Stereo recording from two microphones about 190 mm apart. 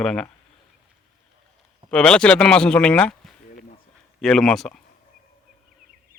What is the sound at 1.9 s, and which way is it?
A man's voice, 5° left (ahead or behind).